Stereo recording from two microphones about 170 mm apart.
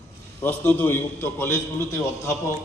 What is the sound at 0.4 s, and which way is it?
A man's voice, 10° left (ahead or behind).